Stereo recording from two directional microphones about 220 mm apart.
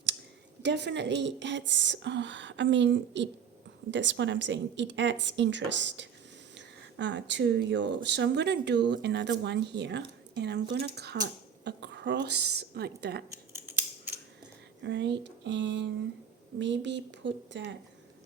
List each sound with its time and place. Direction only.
0.6 s speech: 50° right (ahead or behind)
13.3 s scissors: 10° right (ahead or behind)
14.8 s speech: 55° right (ahead or behind)